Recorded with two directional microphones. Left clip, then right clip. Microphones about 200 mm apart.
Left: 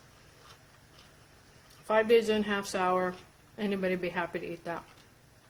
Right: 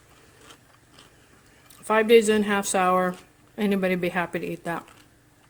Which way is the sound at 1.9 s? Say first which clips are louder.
Right 7 dB; 45° right (ahead or behind).